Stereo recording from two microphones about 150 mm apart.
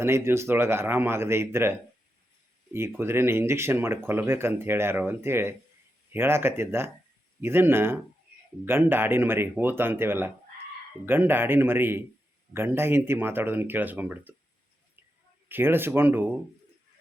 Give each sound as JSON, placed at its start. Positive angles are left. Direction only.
{"t": 0.0, "sound": "speech", "side_deg": -15}
{"t": 2.7, "sound": "speech", "side_deg": -15}
{"t": 15.4, "sound": "speech", "side_deg": -15}